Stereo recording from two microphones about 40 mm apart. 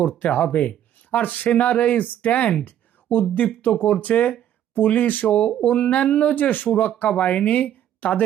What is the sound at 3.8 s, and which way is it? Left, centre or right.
Speech, left.